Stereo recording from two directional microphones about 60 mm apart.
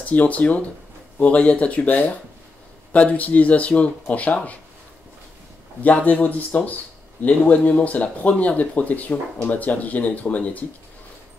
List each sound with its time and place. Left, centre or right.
0.0 s speech: left
5.8 s speech: left